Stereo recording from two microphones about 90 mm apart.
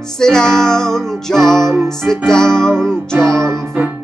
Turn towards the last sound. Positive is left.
turn(degrees=-20)  # may be behind; listen again after turning